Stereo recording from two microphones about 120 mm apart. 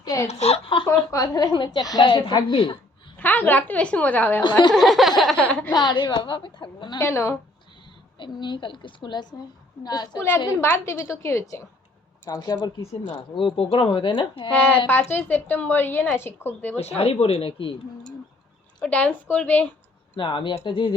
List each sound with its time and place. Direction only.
0.0 s speech: 30° left (ahead or behind)
0.3 s speech: 65° left (ahead or behind)
0.9 s a woman's voice: 30° left (ahead or behind)
3.2 s speech: 15° left (ahead or behind)
4.7 s a sound: centre (ahead or behind)
5.7 s a woman's voice: 40° left (ahead or behind)
7.0 s a woman's voice: 20° left (ahead or behind)
8.2 s a woman's voice: 40° left (ahead or behind)
10.2 s a woman's voice: 15° left (ahead or behind)
12.9 s speech: 55° left (ahead or behind)
14.5 s speech: 10° left (ahead or behind)
17.0 s speech: 55° left (ahead or behind)
18.8 s speech: 10° left (ahead or behind)
20.1 s speech: 45° left (ahead or behind)